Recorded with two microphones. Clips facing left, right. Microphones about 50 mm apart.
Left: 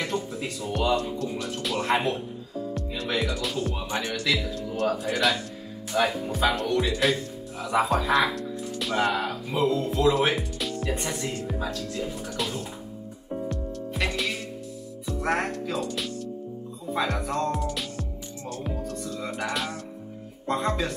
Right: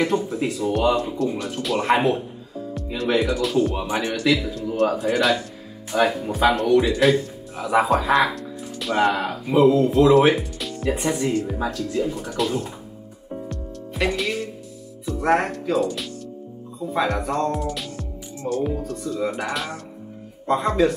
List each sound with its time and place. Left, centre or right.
0.0 s speech: centre
3.7 s speech: centre
4.3 s speech: centre
9.0 s speech: centre
13.3 s music: centre
15.0 s speech: centre